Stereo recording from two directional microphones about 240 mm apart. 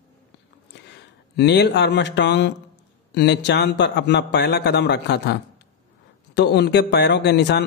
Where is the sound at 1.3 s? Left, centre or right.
Left.